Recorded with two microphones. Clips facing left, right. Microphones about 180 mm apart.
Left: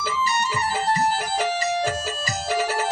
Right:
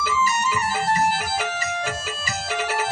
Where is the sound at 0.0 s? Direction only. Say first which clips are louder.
Right 2 dB; 30° left (ahead or behind).